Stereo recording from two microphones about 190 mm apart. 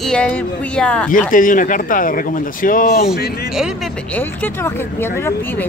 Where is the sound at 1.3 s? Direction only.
45° left (ahead or behind).